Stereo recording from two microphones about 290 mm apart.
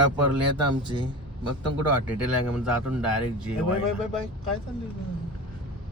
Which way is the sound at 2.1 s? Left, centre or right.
Centre.